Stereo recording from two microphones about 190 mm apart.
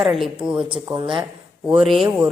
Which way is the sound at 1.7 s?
5° right (ahead or behind).